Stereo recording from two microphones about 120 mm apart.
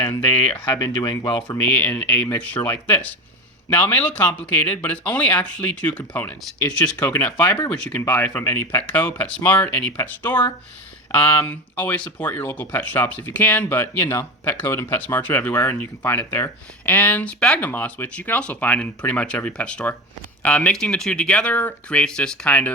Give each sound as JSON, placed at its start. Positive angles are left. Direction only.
{"t": 0.6, "sound": "speech", "side_deg": 35}
{"t": 1.7, "sound": "speech", "side_deg": 15}
{"t": 6.4, "sound": "speech", "side_deg": 5}